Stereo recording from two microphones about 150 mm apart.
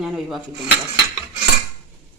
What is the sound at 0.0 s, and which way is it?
Speech, centre (ahead or behind).